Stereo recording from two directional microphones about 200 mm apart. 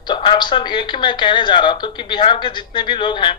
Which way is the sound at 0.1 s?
25° left (ahead or behind).